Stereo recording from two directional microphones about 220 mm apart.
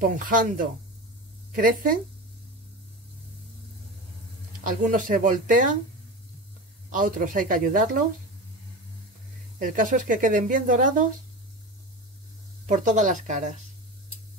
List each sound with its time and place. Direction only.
0.0 s speech: 35° right (ahead or behind)
4.8 s speech: 35° right (ahead or behind)
6.9 s speech: 35° right (ahead or behind)
9.6 s speech: 40° right (ahead or behind)
12.6 s speech: 35° right (ahead or behind)